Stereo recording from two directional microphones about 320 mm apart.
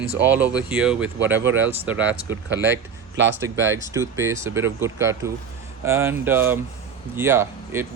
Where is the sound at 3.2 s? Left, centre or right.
Right.